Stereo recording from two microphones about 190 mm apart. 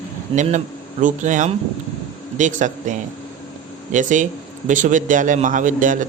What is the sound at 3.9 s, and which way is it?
A man's voice, 40° right (ahead or behind).